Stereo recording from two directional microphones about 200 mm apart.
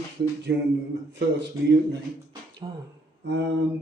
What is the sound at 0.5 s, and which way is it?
Speech, 60° right (ahead or behind).